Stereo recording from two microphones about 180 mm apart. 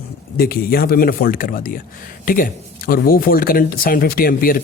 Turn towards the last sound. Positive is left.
turn(degrees=55)  # may be behind; listen again after turning